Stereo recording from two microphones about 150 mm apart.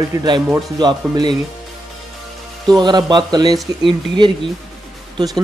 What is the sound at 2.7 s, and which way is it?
Speech, 30° right (ahead or behind).